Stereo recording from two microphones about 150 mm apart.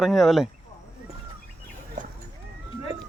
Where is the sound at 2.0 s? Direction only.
55° right (ahead or behind).